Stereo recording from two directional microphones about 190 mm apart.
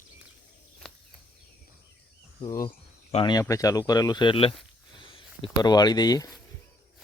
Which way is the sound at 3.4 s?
15° left (ahead or behind).